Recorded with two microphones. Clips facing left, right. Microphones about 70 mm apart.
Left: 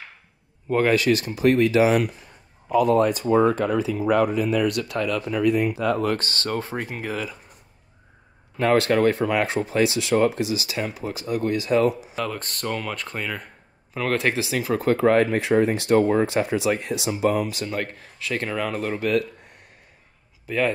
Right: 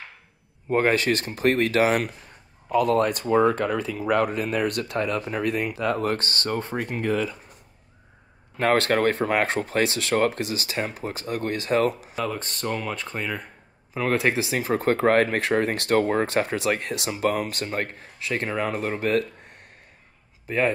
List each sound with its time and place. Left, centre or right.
0.7 s speech: right
6.4 s speech: centre
8.5 s speech: right
12.2 s speech: centre
14.4 s speech: right
20.4 s speech: right